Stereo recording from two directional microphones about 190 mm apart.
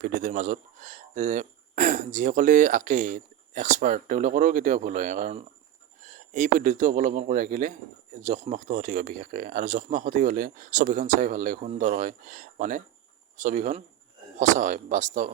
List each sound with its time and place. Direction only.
0.0 s a man's voice: 40° right (ahead or behind)